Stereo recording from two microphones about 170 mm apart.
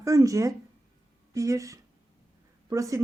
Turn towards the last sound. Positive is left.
turn(degrees=-20)  # may be behind; listen again after turning